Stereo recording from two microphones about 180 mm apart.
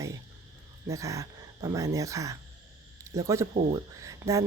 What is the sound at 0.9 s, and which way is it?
Speech, 15° right (ahead or behind).